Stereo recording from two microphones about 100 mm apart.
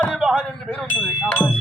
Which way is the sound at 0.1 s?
5° right (ahead or behind).